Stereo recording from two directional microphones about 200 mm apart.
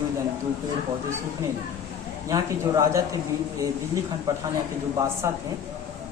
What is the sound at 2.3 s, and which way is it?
Speech, 15° right (ahead or behind).